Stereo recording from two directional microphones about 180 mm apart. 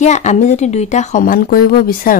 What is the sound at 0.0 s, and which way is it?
A woman's voice, 40° left (ahead or behind).